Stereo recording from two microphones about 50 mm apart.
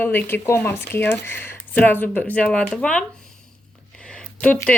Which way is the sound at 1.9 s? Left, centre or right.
Left.